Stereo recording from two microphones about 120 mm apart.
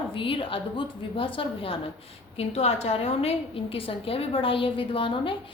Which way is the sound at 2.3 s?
60° left (ahead or behind).